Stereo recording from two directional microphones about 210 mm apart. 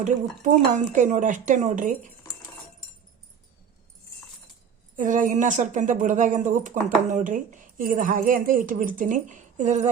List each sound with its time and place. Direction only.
0.0 s speech: 35° right (ahead or behind)
4.9 s speech: 40° right (ahead or behind)